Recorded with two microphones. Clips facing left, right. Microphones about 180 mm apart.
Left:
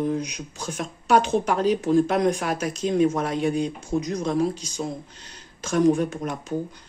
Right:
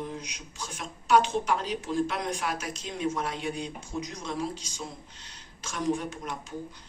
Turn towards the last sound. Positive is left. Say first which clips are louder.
# left 8 dB
turn(degrees=50)  # may be behind; listen again after turning